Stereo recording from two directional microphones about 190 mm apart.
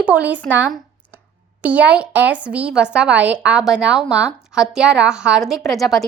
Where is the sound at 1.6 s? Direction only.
5° right (ahead or behind).